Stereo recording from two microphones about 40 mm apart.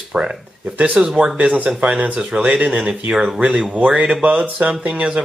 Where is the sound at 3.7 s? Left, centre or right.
Right.